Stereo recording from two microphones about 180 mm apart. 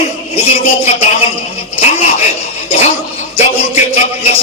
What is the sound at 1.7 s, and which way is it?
Zipper, 35° left (ahead or behind).